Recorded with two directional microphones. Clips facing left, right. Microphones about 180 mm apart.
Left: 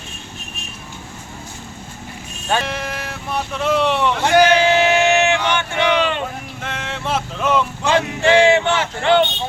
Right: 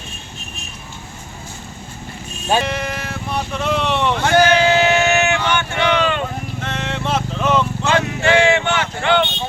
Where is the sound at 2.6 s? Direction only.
Centre (ahead or behind).